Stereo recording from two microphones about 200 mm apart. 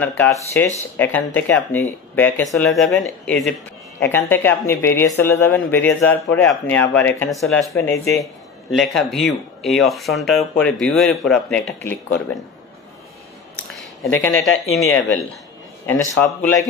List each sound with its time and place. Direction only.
0.0 s speech: 10° left (ahead or behind)
7.7 s speech: 15° left (ahead or behind)
8.7 s speech: centre (ahead or behind)
14.1 s speech: 70° left (ahead or behind)
14.4 s speech: centre (ahead or behind)
15.9 s speech: 10° left (ahead or behind)